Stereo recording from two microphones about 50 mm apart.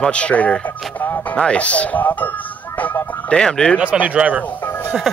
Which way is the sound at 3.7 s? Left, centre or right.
Right.